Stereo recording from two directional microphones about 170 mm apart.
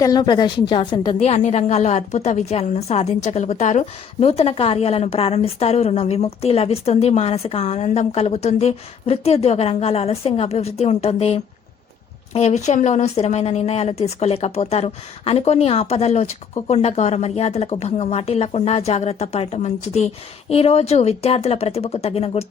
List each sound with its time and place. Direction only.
0.0 s a woman's voice: 25° left (ahead or behind)